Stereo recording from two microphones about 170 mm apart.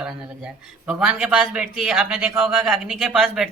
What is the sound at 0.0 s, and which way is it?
Speech, 5° right (ahead or behind).